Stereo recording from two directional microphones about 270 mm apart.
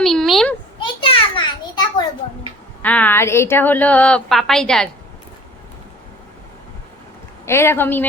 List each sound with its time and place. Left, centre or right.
0.0 s a sound: centre
0.8 s children playing: centre
2.8 s a woman's voice: centre
7.4 s a woman's voice: centre